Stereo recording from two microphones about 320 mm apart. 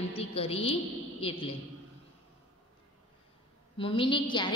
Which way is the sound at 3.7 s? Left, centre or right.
Centre.